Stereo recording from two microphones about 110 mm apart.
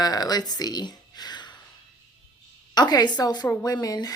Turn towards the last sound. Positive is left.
turn(degrees=35)  # may be behind; listen again after turning